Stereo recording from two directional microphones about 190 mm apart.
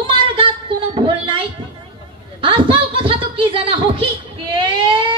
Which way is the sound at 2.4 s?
30° right (ahead or behind).